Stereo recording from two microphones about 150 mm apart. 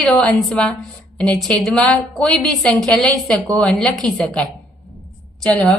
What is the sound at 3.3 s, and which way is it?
Speech, 25° right (ahead or behind).